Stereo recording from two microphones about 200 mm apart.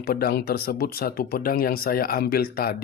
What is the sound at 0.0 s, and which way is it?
Speech, 50° left (ahead or behind).